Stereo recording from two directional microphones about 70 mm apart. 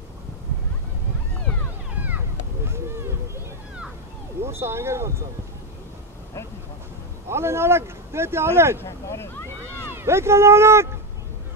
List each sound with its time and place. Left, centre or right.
2.0 s a sound: right
2.6 s a sound: right
4.4 s speech: right
7.2 s speech: right
9.1 s boat: left
9.9 s speech: right